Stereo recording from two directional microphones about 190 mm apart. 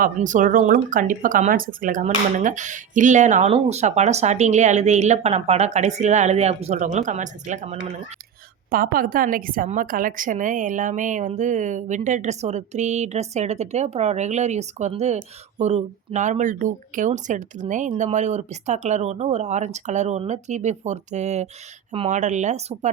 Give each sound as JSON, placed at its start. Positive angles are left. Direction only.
{"t": 0.0, "sound": "a woman's voice", "side_deg": -40}
{"t": 8.7, "sound": "a woman's voice", "side_deg": -50}